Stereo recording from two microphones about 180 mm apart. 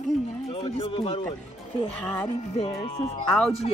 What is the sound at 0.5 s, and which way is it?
Speech, 30° left (ahead or behind).